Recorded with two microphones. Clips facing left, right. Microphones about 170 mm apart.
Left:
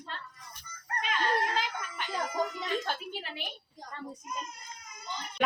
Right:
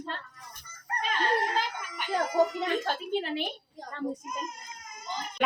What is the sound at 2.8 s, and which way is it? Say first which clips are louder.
Speech: right 7 dB; 45° right (ahead or behind).